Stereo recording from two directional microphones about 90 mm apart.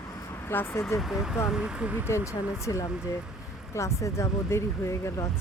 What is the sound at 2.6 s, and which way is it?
Speech, 35° left (ahead or behind).